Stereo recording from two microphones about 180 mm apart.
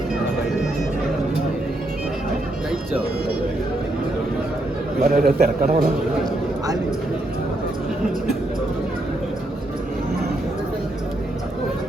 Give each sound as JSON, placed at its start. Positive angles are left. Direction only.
{"t": 5.0, "sound": "a man's voice", "side_deg": -55}